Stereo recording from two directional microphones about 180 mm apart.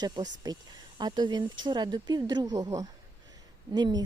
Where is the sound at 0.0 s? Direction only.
20° right (ahead or behind).